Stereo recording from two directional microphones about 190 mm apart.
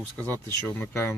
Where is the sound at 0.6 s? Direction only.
10° left (ahead or behind).